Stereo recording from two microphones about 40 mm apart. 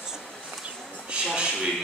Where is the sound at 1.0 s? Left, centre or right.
Right.